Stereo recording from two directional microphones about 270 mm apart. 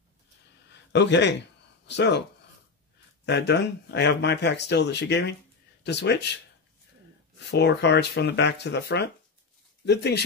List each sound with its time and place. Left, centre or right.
0.7 s a sound: left
3.3 s speech: left
7.3 s speech: left